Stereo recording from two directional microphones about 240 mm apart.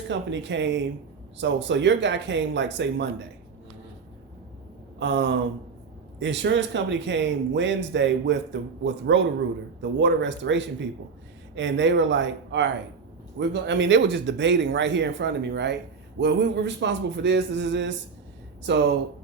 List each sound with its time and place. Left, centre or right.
0.1 s speech: right
4.9 s a sound: right
6.1 s speech: right